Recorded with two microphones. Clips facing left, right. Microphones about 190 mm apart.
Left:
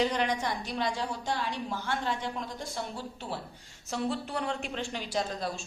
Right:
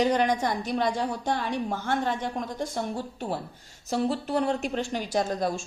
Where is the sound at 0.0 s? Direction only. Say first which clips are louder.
Right 5 dB; 45° right (ahead or behind).